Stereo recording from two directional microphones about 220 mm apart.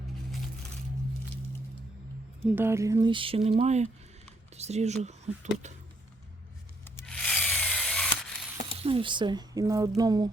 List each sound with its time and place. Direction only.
2.6 s speech: 10° right (ahead or behind); by 5.7 s 30° right (ahead or behind)
6.8 s tools: 5° left (ahead or behind)
8.8 s speech: 25° right (ahead or behind)
10.0 s a sound: 15° right (ahead or behind)